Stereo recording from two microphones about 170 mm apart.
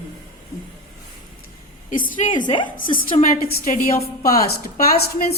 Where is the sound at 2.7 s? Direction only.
55° left (ahead or behind).